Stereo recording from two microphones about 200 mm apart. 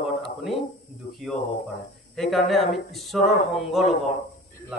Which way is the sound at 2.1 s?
Centre (ahead or behind).